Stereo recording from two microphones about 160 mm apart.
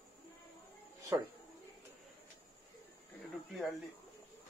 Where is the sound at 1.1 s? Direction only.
20° right (ahead or behind).